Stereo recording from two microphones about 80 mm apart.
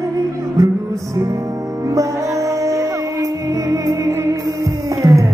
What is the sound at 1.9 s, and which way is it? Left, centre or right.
Music, right.